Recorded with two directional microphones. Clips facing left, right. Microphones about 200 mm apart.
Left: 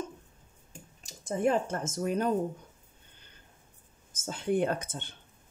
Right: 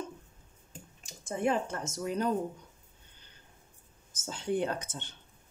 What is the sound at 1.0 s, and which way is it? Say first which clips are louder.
Speech: left 3 dB; 40° left (ahead or behind).